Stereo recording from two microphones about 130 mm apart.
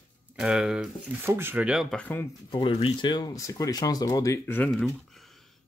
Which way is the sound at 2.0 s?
15° left (ahead or behind).